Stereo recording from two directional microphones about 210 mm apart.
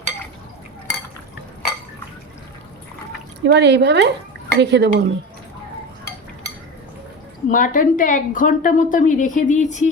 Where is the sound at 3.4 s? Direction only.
55° right (ahead or behind).